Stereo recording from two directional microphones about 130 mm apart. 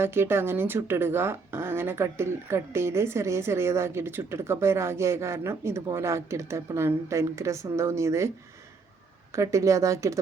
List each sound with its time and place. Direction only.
0.0 s speech: 20° right (ahead or behind)
9.3 s speech: 25° right (ahead or behind)